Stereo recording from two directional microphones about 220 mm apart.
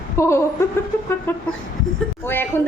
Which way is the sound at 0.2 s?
10° left (ahead or behind).